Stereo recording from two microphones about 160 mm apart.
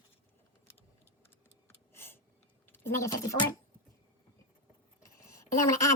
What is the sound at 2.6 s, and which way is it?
Speech, 15° left (ahead or behind).